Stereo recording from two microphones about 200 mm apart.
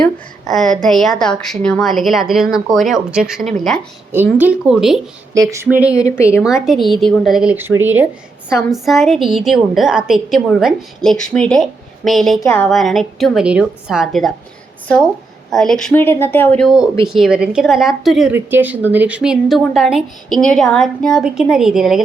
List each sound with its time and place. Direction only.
0.0 s a woman's voice: centre (ahead or behind)
5.3 s a sound: 15° right (ahead or behind)
5.9 s speech: 15° left (ahead or behind)
6.4 s a woman's voice: centre (ahead or behind)
15.4 s a woman's voice: centre (ahead or behind)